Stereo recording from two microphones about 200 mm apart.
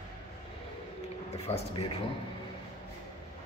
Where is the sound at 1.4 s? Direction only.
30° left (ahead or behind).